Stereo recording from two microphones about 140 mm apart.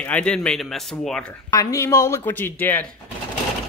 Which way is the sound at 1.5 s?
25° left (ahead or behind).